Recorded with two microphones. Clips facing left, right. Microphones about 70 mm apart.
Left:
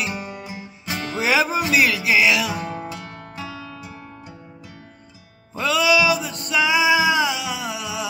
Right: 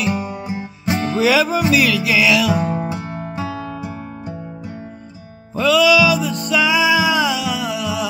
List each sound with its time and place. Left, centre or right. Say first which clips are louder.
0.8 s music: right 8 dB; right
1.1 s music: right 3 dB; left
2.5 s music: right 8 dB; right
5.6 s music: right 5 dB; left